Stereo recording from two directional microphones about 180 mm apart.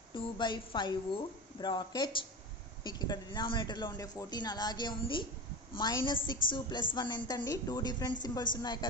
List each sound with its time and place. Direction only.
0.1 s a woman's voice: 25° left (ahead or behind)